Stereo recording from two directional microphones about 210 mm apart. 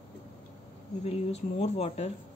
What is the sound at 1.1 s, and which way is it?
Speech, 30° left (ahead or behind).